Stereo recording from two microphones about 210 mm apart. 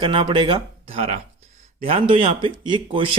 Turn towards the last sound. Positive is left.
turn(degrees=-25)  # may be behind; listen again after turning